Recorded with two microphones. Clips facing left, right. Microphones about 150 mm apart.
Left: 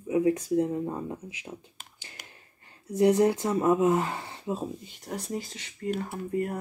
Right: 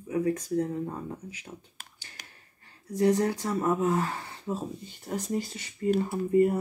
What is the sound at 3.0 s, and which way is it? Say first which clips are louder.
Speech: left 3 dB; 15° left (ahead or behind).